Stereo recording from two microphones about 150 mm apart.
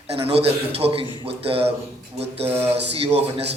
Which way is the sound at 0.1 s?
40° right (ahead or behind).